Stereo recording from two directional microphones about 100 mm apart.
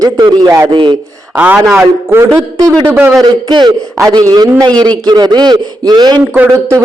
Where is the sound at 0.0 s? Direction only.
40° right (ahead or behind).